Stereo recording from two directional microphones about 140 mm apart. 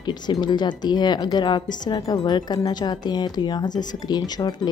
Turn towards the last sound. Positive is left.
turn(degrees=30)  # may be behind; listen again after turning